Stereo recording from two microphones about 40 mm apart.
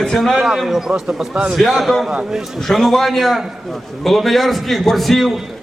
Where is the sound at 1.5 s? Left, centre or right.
Centre.